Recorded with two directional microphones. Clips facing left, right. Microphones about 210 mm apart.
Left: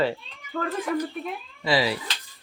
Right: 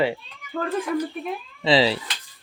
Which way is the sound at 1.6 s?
25° right (ahead or behind).